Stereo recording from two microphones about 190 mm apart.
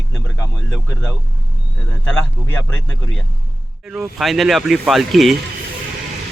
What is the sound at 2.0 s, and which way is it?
Speech, 5° left (ahead or behind).